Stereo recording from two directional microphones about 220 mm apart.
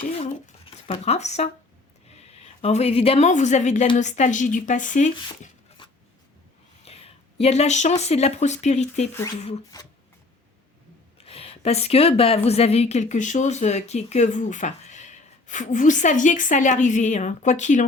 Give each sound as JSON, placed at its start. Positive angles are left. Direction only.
{"t": 0.0, "sound": "a woman's voice", "side_deg": 30}
{"t": 6.8, "sound": "speech", "side_deg": 25}
{"t": 11.2, "sound": "a woman's voice", "side_deg": 25}